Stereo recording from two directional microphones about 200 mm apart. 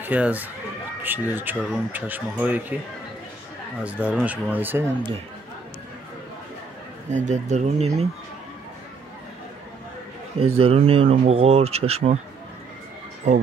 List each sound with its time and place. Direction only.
0.0 s speech: 10° right (ahead or behind)
3.8 s speech: 5° right (ahead or behind)
7.1 s speech: 35° right (ahead or behind)
10.5 s speech: 30° right (ahead or behind)